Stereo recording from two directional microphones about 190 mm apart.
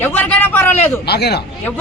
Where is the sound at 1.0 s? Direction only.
60° left (ahead or behind).